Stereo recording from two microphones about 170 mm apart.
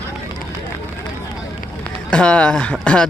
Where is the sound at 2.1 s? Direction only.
5° left (ahead or behind).